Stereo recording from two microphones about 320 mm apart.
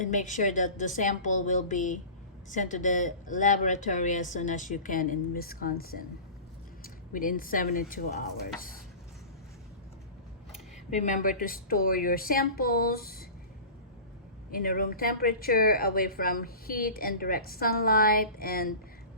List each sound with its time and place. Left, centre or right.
0.0 s speech: left
10.9 s speech: left
14.5 s speech: left